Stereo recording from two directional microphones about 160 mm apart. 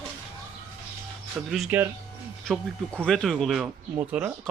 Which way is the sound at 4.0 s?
10° right (ahead or behind).